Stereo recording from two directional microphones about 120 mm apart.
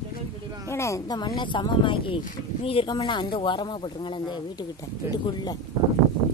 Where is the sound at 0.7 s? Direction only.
25° left (ahead or behind).